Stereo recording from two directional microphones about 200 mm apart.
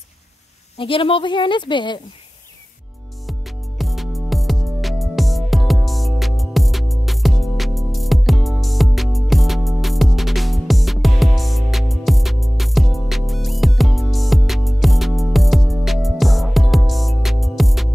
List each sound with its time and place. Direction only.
0.7 s a woman's voice: 25° left (ahead or behind)
3.3 s music: centre (ahead or behind)